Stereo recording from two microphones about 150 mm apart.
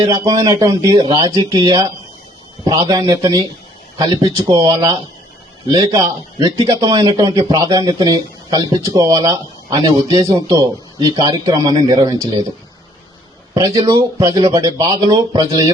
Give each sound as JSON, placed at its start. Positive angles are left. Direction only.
{"t": 0.0, "sound": "a man's voice", "side_deg": -30}
{"t": 13.5, "sound": "a man's voice", "side_deg": -25}